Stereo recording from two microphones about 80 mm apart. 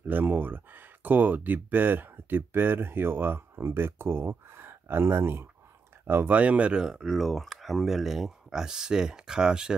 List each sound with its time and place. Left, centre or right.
0.1 s speech: right